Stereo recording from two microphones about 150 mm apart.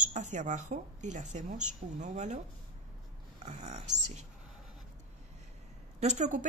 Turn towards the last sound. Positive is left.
turn(degrees=-55)  # may be behind; listen again after turning